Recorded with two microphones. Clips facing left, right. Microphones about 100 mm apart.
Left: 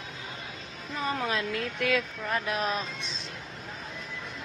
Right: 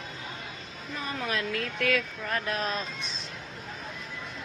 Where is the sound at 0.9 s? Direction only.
25° left (ahead or behind).